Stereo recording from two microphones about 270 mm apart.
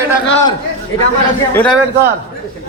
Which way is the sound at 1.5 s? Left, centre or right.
Centre.